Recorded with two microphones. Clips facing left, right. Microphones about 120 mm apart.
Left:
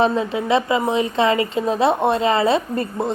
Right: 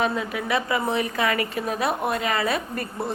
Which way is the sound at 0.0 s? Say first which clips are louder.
Left 6 dB; 25° left (ahead or behind).